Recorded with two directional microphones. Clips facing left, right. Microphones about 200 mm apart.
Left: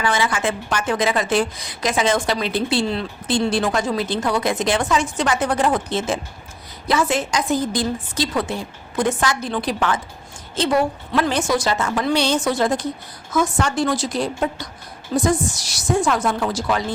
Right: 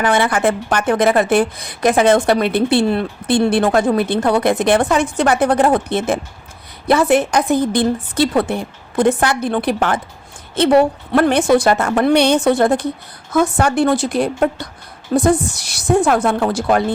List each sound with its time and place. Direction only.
0.0 s a woman's voice: 55° right (ahead or behind)